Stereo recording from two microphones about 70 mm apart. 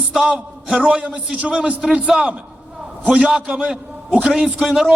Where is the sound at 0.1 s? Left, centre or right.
Centre.